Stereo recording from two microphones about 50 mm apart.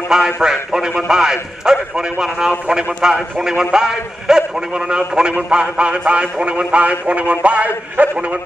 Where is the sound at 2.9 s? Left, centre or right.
Centre.